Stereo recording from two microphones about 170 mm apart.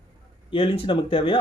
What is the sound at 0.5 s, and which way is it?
Speech, 30° left (ahead or behind).